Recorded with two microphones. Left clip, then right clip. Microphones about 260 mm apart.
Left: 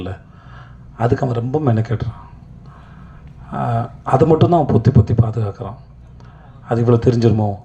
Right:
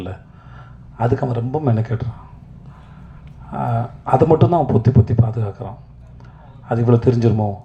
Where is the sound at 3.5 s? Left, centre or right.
Left.